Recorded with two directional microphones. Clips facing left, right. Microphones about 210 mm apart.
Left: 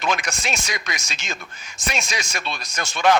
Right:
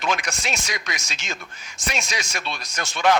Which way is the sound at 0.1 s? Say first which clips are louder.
Left 1 dB; 50° left (ahead or behind).